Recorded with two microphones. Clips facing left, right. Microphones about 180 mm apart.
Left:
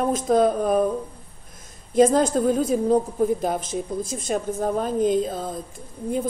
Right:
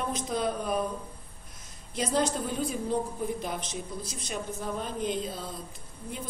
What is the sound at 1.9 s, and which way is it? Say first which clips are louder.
A woman's voice: left 11 dB; 45° left (ahead or behind).